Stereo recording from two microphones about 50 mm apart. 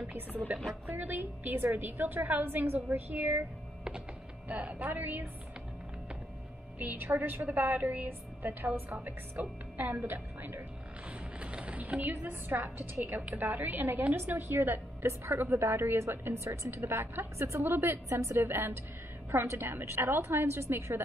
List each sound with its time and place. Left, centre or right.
0.0 s a woman's voice: right
4.5 s a woman's voice: right
6.8 s a woman's voice: right
8.4 s a woman's voice: right
11.3 s sewing machine: right
12.2 s a woman's voice: right
16.4 s a woman's voice: right
16.8 s a woman's voice: right
19.4 s a woman's voice: right
19.7 s a woman's voice: right